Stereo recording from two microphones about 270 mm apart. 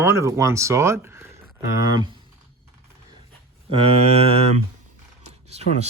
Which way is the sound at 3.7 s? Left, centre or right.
Right.